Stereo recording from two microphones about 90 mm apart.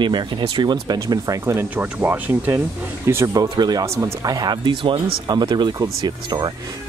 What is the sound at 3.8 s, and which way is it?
Speech, 35° right (ahead or behind).